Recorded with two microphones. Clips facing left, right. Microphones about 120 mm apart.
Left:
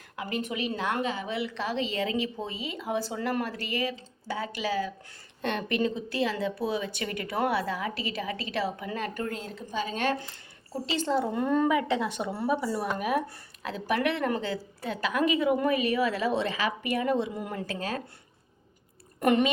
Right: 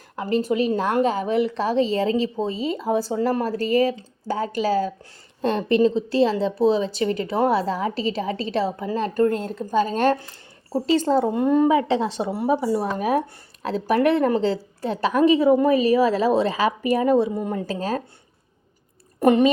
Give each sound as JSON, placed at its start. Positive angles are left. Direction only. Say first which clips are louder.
{"t": 0.2, "sound": "a woman's voice", "louder": "right 10 dB", "side_deg": -35}
{"t": 11.3, "sound": "a woman's voice", "louder": "right 7 dB", "side_deg": -20}
{"t": 17.4, "sound": "speech", "louder": "right 8 dB", "side_deg": -25}
{"t": 17.7, "sound": "a woman's voice", "louder": "right 7 dB", "side_deg": -40}
{"t": 19.2, "sound": "a woman's voice", "louder": "right 7 dB", "side_deg": -30}